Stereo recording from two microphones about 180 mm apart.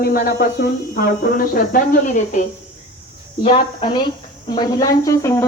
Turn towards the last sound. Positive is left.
turn(degrees=15)  # may be behind; listen again after turning